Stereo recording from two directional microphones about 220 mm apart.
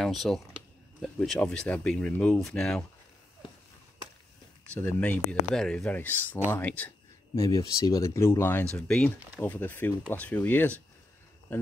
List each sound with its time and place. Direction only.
0.0 s speech: centre (ahead or behind)
4.7 s speech: 10° left (ahead or behind)